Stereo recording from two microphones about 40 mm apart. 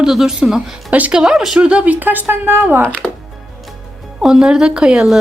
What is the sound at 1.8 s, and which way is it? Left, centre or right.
Speech, right.